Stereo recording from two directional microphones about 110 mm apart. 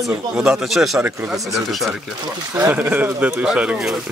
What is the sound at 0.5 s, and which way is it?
Speech, centre (ahead or behind).